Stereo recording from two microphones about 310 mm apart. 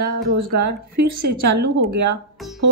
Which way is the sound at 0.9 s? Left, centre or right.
Right.